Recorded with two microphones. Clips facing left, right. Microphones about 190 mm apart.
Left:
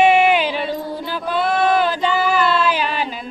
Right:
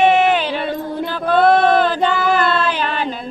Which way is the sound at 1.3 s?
55° right (ahead or behind).